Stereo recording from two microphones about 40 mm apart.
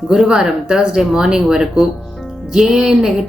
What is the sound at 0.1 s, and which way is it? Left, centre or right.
A woman's voice, centre.